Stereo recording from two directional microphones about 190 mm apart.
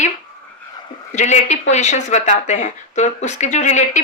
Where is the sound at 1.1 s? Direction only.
40° left (ahead or behind).